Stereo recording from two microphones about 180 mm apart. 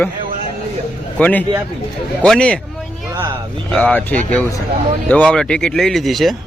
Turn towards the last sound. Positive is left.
turn(degrees=0)  # may be behind; listen again after turning